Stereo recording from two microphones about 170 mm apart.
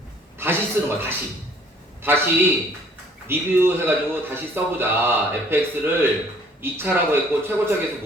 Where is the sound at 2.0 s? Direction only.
15° right (ahead or behind).